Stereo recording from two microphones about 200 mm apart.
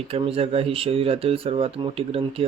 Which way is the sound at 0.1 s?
30° right (ahead or behind).